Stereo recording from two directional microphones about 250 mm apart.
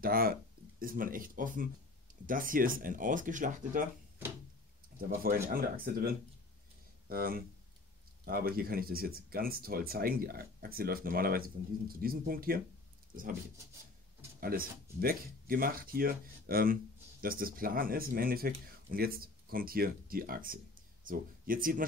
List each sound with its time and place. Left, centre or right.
0.0 s speech: right
5.0 s speech: right
14.4 s speech: right